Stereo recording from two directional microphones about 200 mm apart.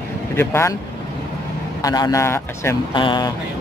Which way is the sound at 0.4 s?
10° left (ahead or behind).